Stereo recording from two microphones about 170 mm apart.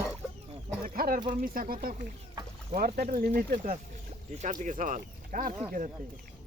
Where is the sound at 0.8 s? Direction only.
60° right (ahead or behind).